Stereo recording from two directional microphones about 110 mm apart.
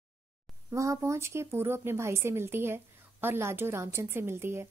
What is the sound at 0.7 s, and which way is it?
Speech, 25° right (ahead or behind).